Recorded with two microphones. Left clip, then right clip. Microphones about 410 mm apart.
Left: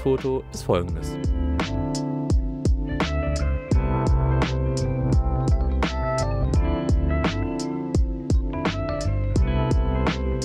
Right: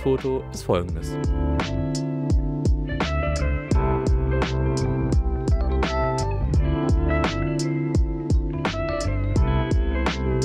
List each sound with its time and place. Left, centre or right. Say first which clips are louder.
0.0 s speech: even; centre
1.6 s music: left 4 dB; left
6.1 s music: left 2 dB; left
9.3 s music: left 2 dB; left